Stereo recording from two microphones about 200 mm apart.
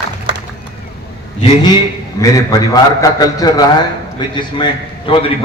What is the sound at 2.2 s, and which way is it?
A man's voice, 15° left (ahead or behind).